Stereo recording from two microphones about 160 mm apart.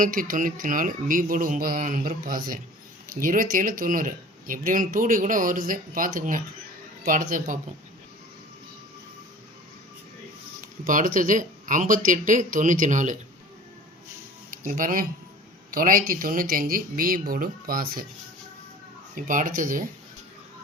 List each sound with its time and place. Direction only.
0.0 s speech: 60° right (ahead or behind)
10.8 s speech: 60° right (ahead or behind)
14.5 s speech: 60° right (ahead or behind)
19.1 s speech: 55° right (ahead or behind)